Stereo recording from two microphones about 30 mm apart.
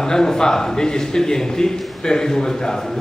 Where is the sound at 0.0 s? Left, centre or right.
Centre.